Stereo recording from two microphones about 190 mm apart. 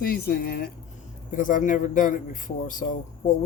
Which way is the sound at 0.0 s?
50° left (ahead or behind).